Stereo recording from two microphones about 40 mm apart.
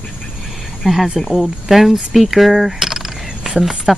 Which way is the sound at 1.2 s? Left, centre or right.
Centre.